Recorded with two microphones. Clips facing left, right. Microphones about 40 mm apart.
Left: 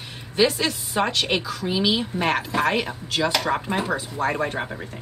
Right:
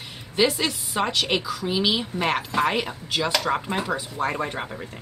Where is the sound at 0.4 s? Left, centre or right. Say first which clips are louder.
Left 1 dB; centre.